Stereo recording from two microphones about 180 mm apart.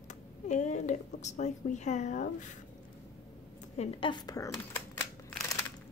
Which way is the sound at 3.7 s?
35° left (ahead or behind).